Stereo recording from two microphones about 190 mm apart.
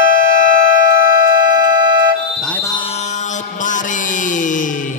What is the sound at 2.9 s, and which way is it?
Mantra, 40° left (ahead or behind).